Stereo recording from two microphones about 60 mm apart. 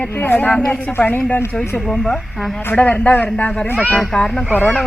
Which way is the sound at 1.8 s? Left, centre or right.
Centre.